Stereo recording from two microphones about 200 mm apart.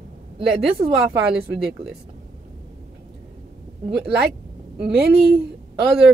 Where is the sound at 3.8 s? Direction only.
25° right (ahead or behind).